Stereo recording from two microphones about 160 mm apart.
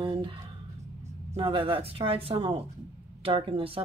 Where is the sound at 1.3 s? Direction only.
35° right (ahead or behind).